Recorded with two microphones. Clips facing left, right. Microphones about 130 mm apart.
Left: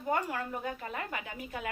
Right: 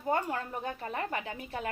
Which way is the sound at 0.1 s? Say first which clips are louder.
Right 1 dB; 35° right (ahead or behind).